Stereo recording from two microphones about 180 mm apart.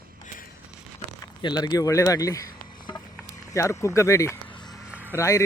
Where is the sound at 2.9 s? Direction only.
15° left (ahead or behind).